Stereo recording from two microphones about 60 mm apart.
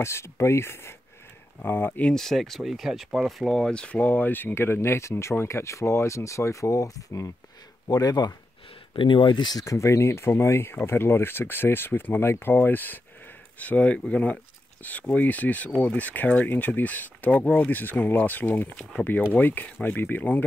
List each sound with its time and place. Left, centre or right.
0.0 s speech: left
2.1 s speech: centre
3.7 s speech: centre; by 7.2 s left
7.9 s speech: left
9.6 s speech: left